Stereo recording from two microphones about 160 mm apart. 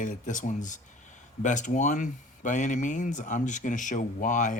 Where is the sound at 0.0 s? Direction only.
55° left (ahead or behind).